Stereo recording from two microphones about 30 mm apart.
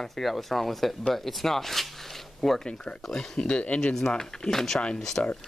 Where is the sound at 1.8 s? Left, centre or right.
Centre.